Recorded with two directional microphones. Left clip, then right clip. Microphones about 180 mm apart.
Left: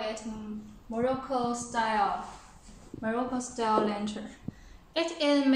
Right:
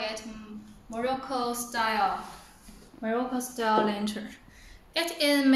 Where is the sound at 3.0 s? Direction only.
5° left (ahead or behind).